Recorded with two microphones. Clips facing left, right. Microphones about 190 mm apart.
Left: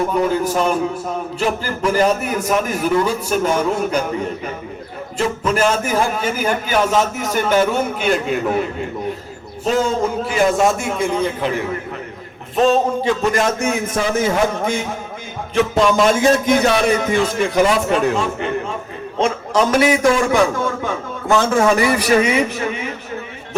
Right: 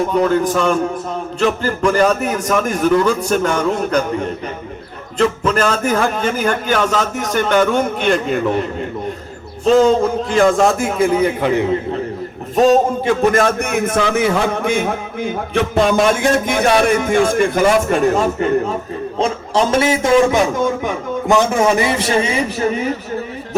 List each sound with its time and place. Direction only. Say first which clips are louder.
0.3 s a man's voice: right 2 dB; 5° left (ahead or behind)
5.1 s a man's voice: right 3 dB; 10° left (ahead or behind)
10.7 s a man's voice: right 4 dB; centre (ahead or behind)
11.4 s a man's voice: right 6 dB; 20° right (ahead or behind)
12.5 s a man's voice: right 3 dB; 40° right (ahead or behind)
19.2 s a man's voice: even; 30° right (ahead or behind)